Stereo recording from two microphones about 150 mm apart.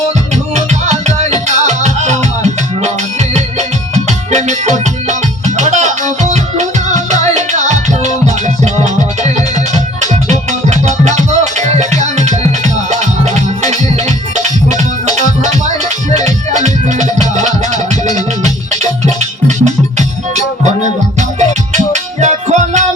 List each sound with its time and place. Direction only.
0.5 s music: 50° right (ahead or behind)
3.9 s music: 50° right (ahead or behind)
18.1 s music: 25° left (ahead or behind)
18.8 s music: 50° right (ahead or behind)